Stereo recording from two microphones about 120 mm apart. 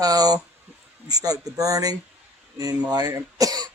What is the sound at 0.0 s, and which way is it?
Speech, 30° right (ahead or behind).